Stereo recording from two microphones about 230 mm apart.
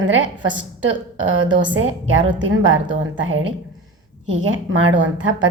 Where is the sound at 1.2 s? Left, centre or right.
Right.